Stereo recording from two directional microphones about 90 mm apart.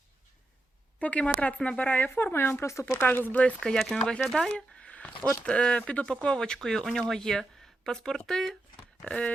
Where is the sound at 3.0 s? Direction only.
20° left (ahead or behind).